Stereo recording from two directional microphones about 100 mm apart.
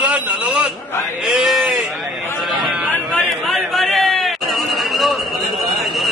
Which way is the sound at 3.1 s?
5° left (ahead or behind).